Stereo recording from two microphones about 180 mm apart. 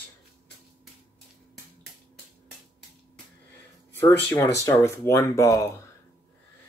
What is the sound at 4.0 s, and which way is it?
Speech, 10° left (ahead or behind).